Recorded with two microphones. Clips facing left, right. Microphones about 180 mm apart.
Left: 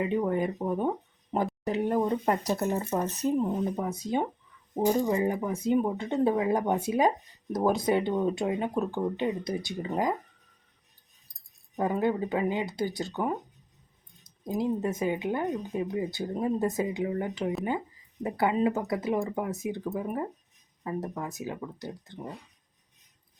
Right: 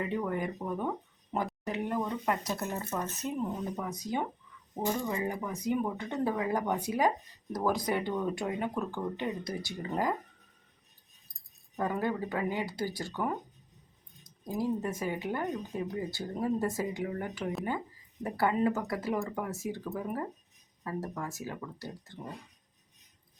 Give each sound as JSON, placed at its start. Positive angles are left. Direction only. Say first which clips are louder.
{"t": 0.0, "sound": "speech", "louder": "left 5 dB", "side_deg": 20}
{"t": 11.8, "sound": "speech", "louder": "left 5 dB", "side_deg": 20}